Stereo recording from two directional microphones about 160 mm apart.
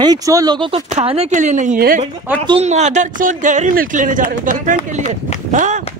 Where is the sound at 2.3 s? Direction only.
10° right (ahead or behind).